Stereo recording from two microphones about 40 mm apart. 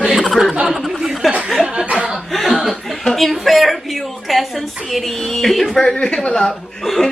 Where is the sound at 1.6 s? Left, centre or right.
Right.